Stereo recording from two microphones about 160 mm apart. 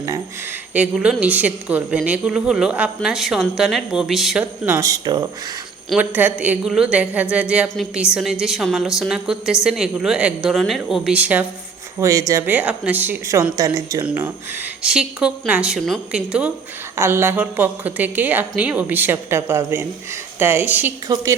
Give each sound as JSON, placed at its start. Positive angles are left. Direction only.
{"t": 0.7, "sound": "a woman's voice", "side_deg": -5}
{"t": 5.9, "sound": "a woman's voice", "side_deg": -10}
{"t": 11.9, "sound": "a woman's voice", "side_deg": -20}
{"t": 17.0, "sound": "a woman's voice", "side_deg": -15}